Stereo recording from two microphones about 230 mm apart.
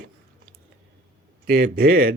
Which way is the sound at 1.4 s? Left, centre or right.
Right.